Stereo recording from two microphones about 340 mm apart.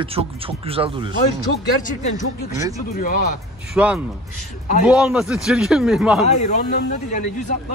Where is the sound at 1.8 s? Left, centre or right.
Left.